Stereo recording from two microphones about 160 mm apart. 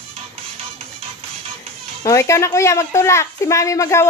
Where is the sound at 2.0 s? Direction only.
20° left (ahead or behind).